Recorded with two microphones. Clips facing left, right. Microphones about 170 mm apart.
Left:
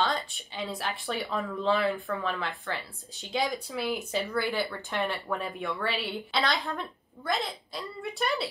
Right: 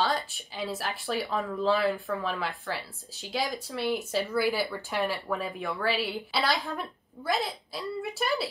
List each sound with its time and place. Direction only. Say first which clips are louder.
0.0 s speech: right 1 dB; 5° right (ahead or behind)